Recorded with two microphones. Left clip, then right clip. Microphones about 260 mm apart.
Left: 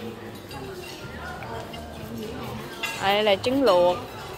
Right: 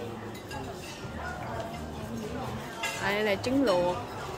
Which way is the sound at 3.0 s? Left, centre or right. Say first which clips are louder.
Left 8 dB; centre.